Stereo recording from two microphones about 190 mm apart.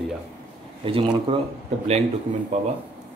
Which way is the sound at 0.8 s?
30° right (ahead or behind).